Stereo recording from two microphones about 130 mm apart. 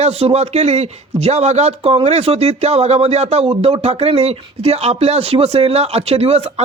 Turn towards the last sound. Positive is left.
turn(degrees=-50)  # may be behind; listen again after turning